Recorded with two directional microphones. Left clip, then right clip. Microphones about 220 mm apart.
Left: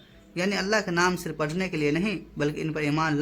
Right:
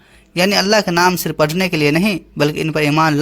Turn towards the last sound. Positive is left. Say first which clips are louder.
# right 12 dB
turn(degrees=-40)  # may be behind; listen again after turning